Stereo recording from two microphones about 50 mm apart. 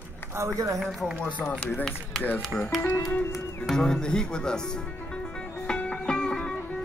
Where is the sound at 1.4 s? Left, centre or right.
Left.